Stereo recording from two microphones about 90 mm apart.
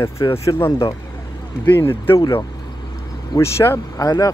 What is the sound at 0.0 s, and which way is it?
Speech, 35° left (ahead or behind).